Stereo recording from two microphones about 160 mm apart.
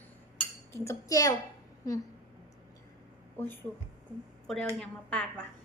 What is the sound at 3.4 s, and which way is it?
Speech, 15° left (ahead or behind).